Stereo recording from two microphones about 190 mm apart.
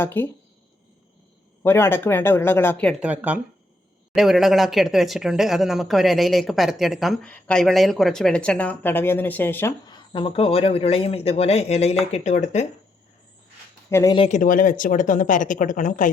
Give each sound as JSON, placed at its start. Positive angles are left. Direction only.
{"t": 0.0, "sound": "speech", "side_deg": 10}
{"t": 1.6, "sound": "speech", "side_deg": 10}
{"t": 3.0, "sound": "speech", "side_deg": -10}
{"t": 13.9, "sound": "speech", "side_deg": 15}
{"t": 14.2, "sound": "speech", "side_deg": 40}